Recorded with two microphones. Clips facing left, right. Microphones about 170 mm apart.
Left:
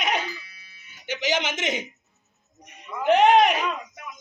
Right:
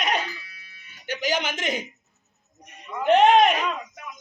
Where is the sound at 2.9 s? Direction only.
Centre (ahead or behind).